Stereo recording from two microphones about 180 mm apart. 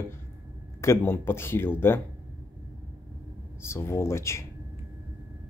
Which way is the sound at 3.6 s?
15° left (ahead or behind).